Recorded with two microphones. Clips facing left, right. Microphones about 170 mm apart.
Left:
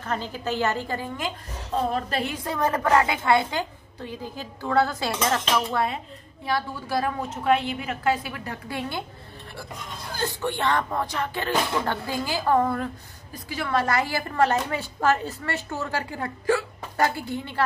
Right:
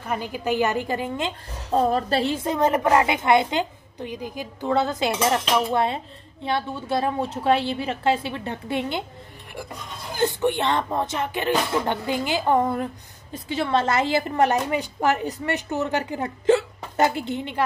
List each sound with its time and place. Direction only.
0.0 s a woman's voice: 10° right (ahead or behind)
1.7 s speech: 40° right (ahead or behind); by 9.0 s 20° right (ahead or behind)
10.1 s speech: 20° right (ahead or behind)